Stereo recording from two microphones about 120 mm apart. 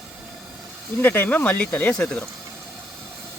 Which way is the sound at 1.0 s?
15° left (ahead or behind).